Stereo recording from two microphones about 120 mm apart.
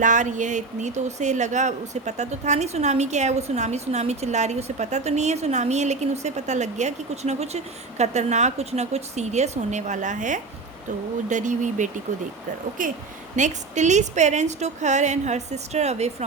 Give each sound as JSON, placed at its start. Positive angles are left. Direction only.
{"t": 0.0, "sound": "speech", "side_deg": -90}